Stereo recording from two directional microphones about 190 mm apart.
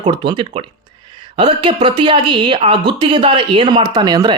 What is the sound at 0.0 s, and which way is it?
Speech, 25° right (ahead or behind).